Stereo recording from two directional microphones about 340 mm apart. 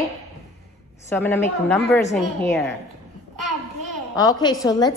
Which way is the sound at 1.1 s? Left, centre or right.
Centre.